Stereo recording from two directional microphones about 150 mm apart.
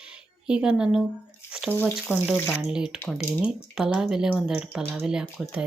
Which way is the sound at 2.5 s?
5° right (ahead or behind).